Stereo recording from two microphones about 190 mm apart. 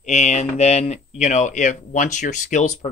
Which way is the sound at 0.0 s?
35° left (ahead or behind).